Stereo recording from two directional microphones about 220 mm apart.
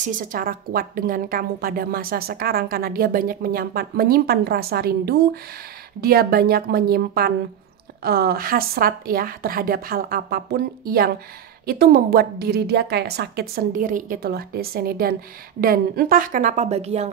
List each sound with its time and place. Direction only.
0.0 s a woman's voice: 35° right (ahead or behind)